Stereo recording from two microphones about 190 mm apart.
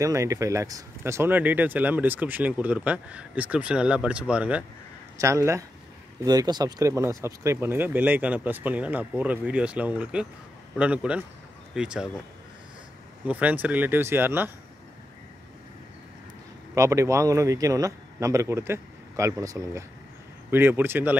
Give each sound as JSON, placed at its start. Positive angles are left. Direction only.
{"t": 0.0, "sound": "speech", "side_deg": -15}
{"t": 13.3, "sound": "speech", "side_deg": -10}
{"t": 16.7, "sound": "speech", "side_deg": -15}